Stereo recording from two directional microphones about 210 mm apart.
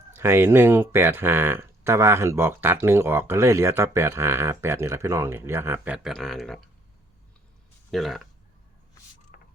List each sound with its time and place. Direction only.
0.1 s speech: 10° right (ahead or behind)
7.9 s speech: centre (ahead or behind)
9.3 s mechanisms: 40° left (ahead or behind)